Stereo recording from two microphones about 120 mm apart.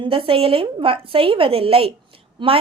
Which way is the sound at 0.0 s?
45° right (ahead or behind).